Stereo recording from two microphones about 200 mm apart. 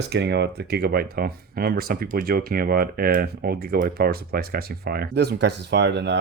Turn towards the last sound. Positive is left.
turn(degrees=-60)  # may be behind; listen again after turning